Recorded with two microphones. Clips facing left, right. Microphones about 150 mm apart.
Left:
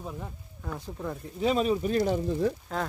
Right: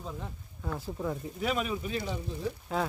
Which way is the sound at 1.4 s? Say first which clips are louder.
Left 7 dB; 30° left (ahead or behind).